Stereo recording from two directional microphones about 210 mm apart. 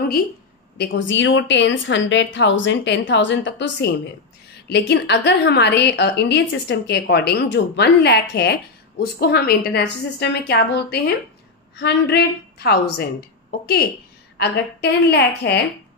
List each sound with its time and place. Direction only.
0.7 s a woman's voice: 60° left (ahead or behind)